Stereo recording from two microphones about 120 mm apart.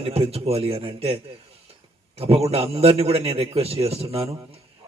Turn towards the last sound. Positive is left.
turn(degrees=-55)  # may be behind; listen again after turning